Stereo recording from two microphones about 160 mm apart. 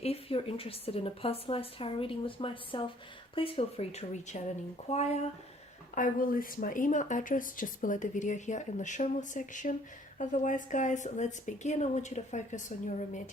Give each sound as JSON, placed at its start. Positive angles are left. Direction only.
{"t": 0.0, "sound": "a woman's voice", "side_deg": 40}
{"t": 5.9, "sound": "speech", "side_deg": 55}